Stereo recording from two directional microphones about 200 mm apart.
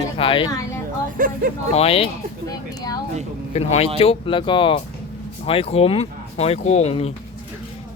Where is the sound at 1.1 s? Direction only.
45° right (ahead or behind).